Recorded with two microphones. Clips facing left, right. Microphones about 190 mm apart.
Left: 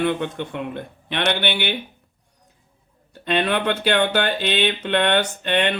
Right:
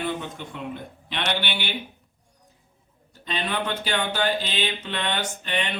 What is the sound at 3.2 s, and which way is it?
Speech, 65° left (ahead or behind).